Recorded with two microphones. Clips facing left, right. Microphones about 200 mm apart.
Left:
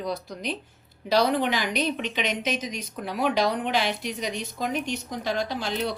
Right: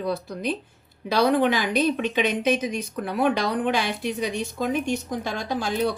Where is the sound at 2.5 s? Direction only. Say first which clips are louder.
Right 6 dB; 55° right (ahead or behind).